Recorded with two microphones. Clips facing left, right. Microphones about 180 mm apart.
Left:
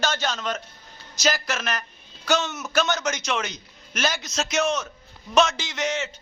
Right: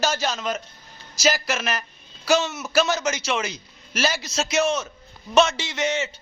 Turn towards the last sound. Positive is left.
turn(degrees=0)  # may be behind; listen again after turning